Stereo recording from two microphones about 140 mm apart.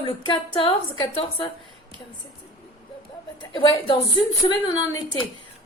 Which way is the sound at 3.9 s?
35° left (ahead or behind).